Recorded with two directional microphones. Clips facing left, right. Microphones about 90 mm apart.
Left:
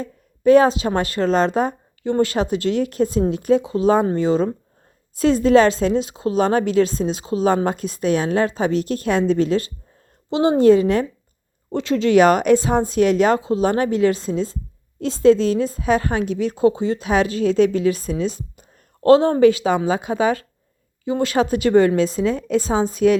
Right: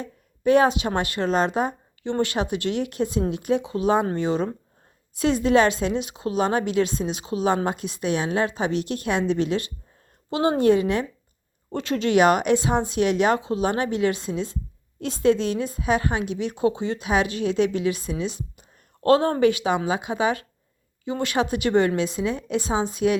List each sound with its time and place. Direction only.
0.0 s a woman's voice: 35° left (ahead or behind)
19.0 s a woman's voice: 25° left (ahead or behind)